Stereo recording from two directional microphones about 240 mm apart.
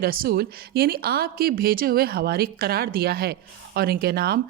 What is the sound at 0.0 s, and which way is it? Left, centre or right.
Speech, right.